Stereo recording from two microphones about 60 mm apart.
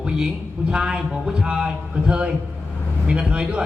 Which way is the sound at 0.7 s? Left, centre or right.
Centre.